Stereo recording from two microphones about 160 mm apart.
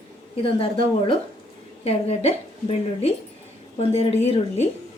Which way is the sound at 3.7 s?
40° left (ahead or behind).